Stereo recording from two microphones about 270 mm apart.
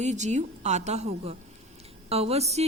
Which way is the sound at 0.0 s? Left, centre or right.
Right.